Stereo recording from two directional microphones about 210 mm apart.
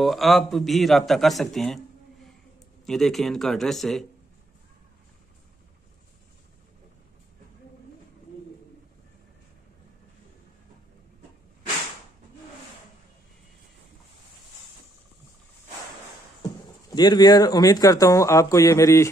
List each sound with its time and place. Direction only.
0.0 s a man's voice: centre (ahead or behind)
2.8 s a man's voice: centre (ahead or behind)
16.9 s speech: 20° left (ahead or behind)